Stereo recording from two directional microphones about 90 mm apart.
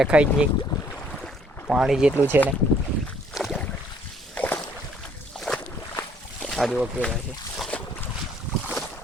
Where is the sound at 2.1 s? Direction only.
25° right (ahead or behind).